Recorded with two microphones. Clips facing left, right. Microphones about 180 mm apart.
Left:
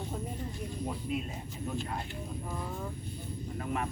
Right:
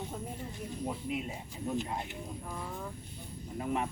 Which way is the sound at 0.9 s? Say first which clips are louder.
Left 1 dB; 15° right (ahead or behind).